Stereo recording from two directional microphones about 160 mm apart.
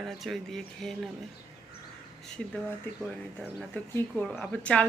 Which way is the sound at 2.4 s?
5° left (ahead or behind).